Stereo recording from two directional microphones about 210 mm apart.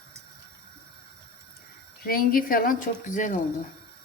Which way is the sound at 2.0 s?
45° left (ahead or behind).